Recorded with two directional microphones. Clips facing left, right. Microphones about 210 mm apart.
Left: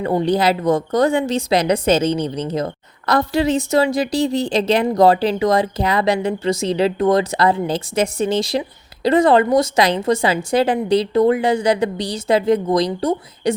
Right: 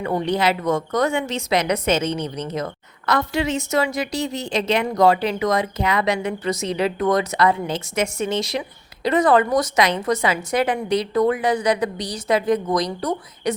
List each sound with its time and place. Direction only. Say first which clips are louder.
0.0 s a woman's voice: left 4 dB; 35° left (ahead or behind)